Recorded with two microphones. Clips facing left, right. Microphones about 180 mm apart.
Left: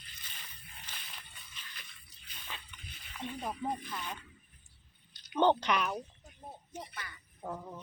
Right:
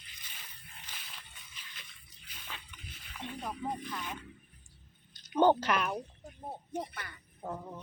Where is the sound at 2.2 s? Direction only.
5° right (ahead or behind).